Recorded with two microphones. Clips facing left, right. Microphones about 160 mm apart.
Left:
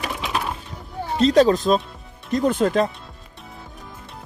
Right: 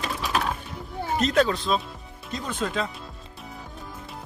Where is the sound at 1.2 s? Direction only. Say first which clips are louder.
Left 7 dB; 35° left (ahead or behind); by 2.9 s 50° left (ahead or behind).